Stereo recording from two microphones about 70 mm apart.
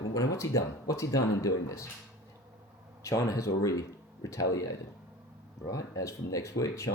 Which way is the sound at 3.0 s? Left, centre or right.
Left.